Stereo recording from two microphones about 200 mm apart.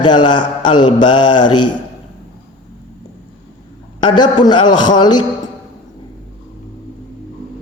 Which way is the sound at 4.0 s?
20° left (ahead or behind).